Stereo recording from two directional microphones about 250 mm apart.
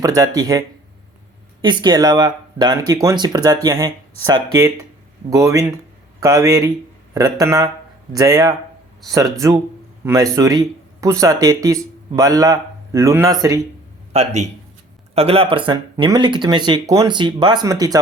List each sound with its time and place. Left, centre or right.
0.0 s speech: centre
1.6 s speech: centre
14.1 s a man's voice: right